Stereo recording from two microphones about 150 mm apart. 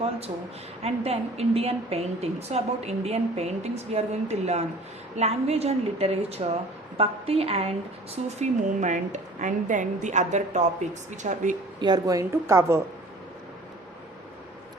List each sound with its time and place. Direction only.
0.8 s a woman's voice: 45° right (ahead or behind)
11.8 s a woman's voice: 25° right (ahead or behind)